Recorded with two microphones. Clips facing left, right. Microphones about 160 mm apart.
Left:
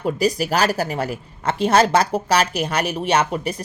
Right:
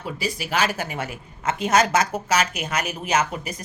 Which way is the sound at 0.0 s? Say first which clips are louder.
Left 9 dB; 40° left (ahead or behind).